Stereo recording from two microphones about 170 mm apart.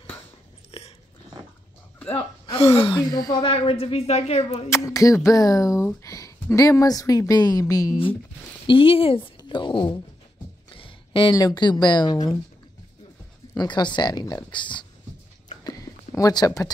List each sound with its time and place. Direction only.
0.7 s biting: 35° left (ahead or behind)
2.5 s a woman's voice: 35° left (ahead or behind)
3.5 s speech: 35° left (ahead or behind)
4.6 s a woman's voice: 15° left (ahead or behind)
8.6 s speech: 30° left (ahead or behind)
13.6 s a woman's voice: 25° left (ahead or behind)
15.5 s a sound: 20° left (ahead or behind)